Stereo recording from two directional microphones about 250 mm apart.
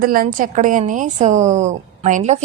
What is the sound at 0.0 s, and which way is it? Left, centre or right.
Speech, right.